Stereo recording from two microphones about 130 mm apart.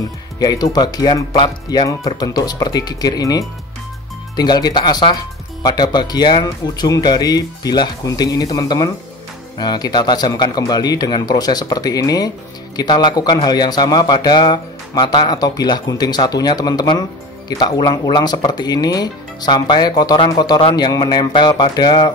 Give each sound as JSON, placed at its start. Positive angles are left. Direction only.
{"t": 0.4, "sound": "a man's voice", "side_deg": 30}